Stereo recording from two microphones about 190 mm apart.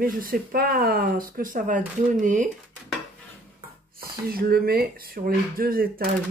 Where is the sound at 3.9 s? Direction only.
50° right (ahead or behind).